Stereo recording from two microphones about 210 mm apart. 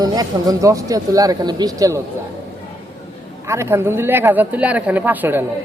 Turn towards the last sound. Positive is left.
turn(degrees=-10)  # may be behind; listen again after turning